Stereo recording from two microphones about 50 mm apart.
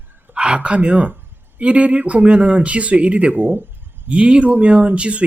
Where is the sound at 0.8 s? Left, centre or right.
Right.